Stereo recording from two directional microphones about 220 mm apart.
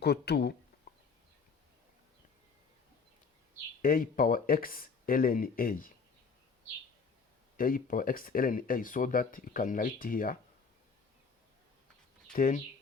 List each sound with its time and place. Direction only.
0.0 s speech: 50° left (ahead or behind)
3.8 s speech: 40° left (ahead or behind)
7.5 s speech: 40° left (ahead or behind)
12.3 s speech: 35° left (ahead or behind)